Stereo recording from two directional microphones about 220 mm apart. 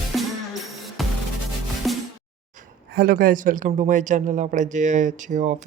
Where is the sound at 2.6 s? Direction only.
40° right (ahead or behind).